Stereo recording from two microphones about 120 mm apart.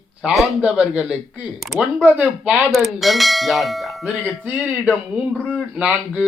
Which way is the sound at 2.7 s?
Centre (ahead or behind).